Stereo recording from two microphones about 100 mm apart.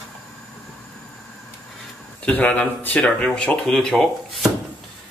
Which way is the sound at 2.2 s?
15° left (ahead or behind).